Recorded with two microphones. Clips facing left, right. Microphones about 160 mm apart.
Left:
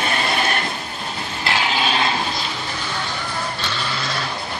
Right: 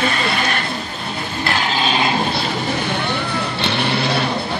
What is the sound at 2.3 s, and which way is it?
Vehicle, 65° right (ahead or behind).